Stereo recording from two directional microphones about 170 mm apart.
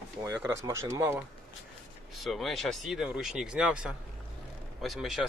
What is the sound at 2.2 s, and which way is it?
Speech, centre (ahead or behind).